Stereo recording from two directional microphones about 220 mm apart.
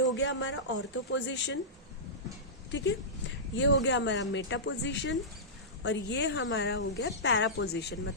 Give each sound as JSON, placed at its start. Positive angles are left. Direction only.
{"t": 0.0, "sound": "speech", "side_deg": 55}
{"t": 3.5, "sound": "speech", "side_deg": 55}